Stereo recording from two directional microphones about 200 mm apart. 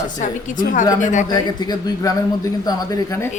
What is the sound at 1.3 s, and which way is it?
A man's voice, 20° left (ahead or behind).